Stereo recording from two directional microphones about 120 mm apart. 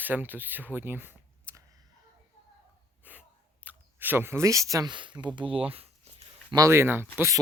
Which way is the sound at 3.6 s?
15° right (ahead or behind).